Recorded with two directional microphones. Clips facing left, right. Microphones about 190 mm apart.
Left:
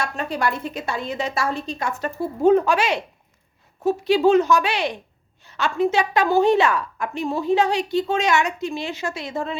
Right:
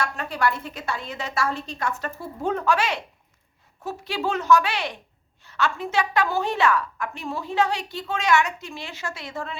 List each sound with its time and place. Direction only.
0.0 s a woman's voice: 15° left (ahead or behind)